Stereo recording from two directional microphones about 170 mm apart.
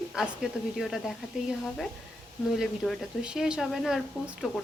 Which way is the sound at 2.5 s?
Centre (ahead or behind).